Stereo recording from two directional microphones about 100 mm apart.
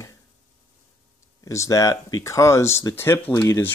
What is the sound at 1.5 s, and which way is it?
Speech, 30° left (ahead or behind).